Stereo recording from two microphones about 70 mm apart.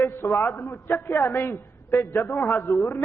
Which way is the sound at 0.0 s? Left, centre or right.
Left.